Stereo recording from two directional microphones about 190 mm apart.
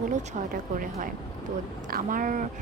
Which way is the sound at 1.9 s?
45° right (ahead or behind).